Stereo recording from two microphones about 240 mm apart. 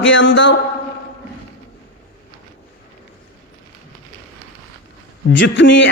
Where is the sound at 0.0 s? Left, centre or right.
Left.